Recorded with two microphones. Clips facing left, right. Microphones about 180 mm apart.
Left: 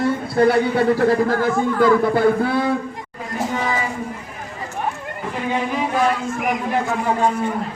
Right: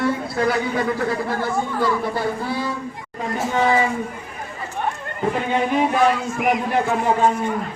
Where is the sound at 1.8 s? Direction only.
55° left (ahead or behind).